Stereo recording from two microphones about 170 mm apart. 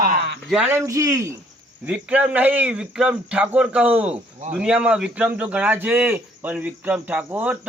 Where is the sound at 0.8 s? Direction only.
20° right (ahead or behind).